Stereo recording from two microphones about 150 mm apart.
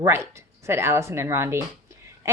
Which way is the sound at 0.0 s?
20° right (ahead or behind).